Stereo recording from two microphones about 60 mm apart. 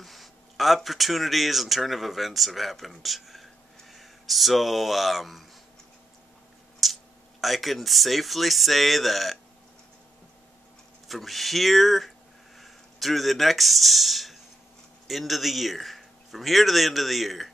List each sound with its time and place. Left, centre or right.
0.0 s speech: centre
6.8 s speech: centre
11.1 s a man's voice: centre